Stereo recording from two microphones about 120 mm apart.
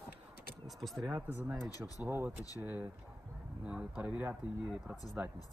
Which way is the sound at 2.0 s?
15° right (ahead or behind).